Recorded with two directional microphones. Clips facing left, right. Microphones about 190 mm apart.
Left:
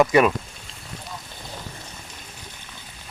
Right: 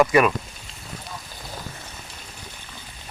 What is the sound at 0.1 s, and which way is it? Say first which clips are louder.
Speech: left 1 dB; 20° left (ahead or behind).